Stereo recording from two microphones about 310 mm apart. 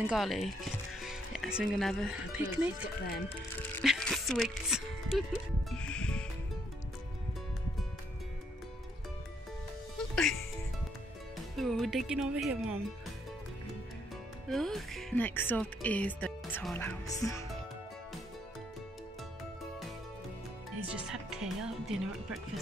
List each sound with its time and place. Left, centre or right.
0.0 s speech: centre
3.1 s speech: left
3.7 s speech: centre
5.7 s music: centre
9.9 s music: centre
11.5 s speech: centre
14.5 s speech: centre
20.8 s speech: centre